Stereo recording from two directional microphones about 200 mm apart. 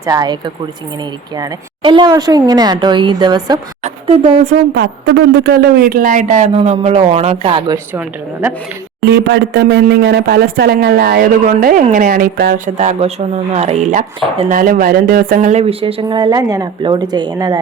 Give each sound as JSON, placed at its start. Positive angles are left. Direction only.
{"t": 0.0, "sound": "speech", "side_deg": -20}
{"t": 3.8, "sound": "speech", "side_deg": -35}
{"t": 4.7, "sound": "speech", "side_deg": -55}
{"t": 7.9, "sound": "a woman's voice", "side_deg": -10}
{"t": 9.0, "sound": "speech", "side_deg": -55}
{"t": 12.7, "sound": "speech", "side_deg": -35}
{"t": 14.5, "sound": "speech", "side_deg": -45}